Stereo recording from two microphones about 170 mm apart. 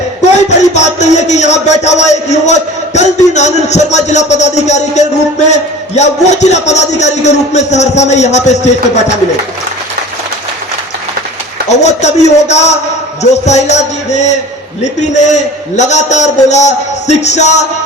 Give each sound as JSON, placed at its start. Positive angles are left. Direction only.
{"t": 0.3, "sound": "a sound", "side_deg": 40}
{"t": 5.5, "sound": "a man's voice", "side_deg": 40}
{"t": 11.8, "sound": "a man's voice", "side_deg": 40}